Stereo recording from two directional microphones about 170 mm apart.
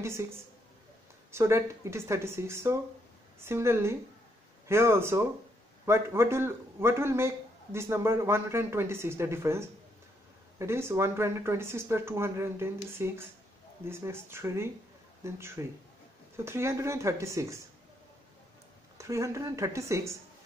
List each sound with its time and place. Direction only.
0.0 s a man's voice: 15° right (ahead or behind)
1.3 s a man's voice: 15° right (ahead or behind)
18.9 s a man's voice: 15° right (ahead or behind)